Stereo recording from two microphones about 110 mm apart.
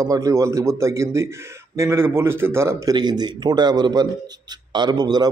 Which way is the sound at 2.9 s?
40° right (ahead or behind).